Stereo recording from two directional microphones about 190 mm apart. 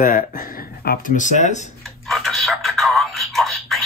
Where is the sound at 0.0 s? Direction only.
45° left (ahead or behind).